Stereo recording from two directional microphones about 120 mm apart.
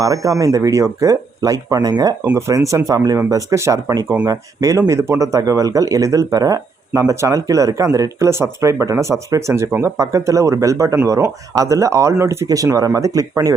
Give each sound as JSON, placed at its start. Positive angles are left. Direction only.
{"t": 0.0, "sound": "speech", "side_deg": -30}